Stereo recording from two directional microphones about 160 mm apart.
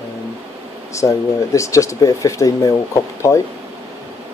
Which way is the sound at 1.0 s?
20° left (ahead or behind).